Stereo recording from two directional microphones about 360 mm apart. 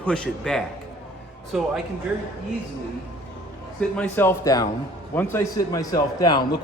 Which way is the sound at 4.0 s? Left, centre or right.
Centre.